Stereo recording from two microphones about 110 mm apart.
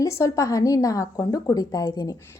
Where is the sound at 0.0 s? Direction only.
25° left (ahead or behind).